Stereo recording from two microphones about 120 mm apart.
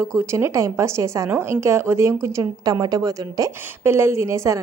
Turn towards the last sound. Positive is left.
turn(degrees=-25)  # may be behind; listen again after turning